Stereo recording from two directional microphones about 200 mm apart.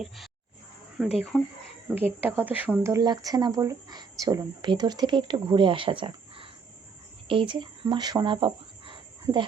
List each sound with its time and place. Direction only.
1.0 s speech: centre (ahead or behind)
2.0 s speech: 10° right (ahead or behind)